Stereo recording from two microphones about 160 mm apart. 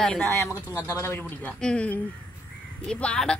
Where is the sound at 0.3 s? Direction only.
20° left (ahead or behind).